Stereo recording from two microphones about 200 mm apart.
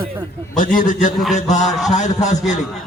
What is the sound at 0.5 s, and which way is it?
A man's voice, 40° left (ahead or behind).